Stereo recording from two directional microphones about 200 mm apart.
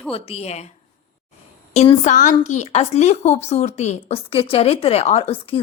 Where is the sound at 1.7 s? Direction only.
30° left (ahead or behind).